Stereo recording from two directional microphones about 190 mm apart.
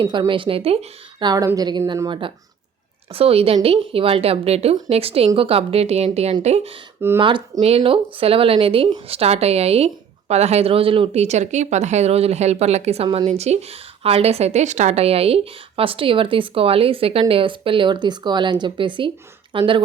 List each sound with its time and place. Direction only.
0.0 s a woman's voice: 25° right (ahead or behind)